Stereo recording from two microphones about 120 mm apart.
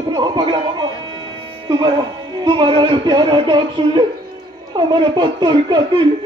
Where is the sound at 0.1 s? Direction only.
40° right (ahead or behind).